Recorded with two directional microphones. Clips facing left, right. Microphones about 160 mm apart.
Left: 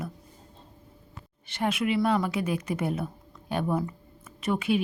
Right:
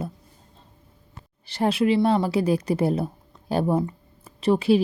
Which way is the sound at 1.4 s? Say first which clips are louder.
Right 6 dB; 35° right (ahead or behind).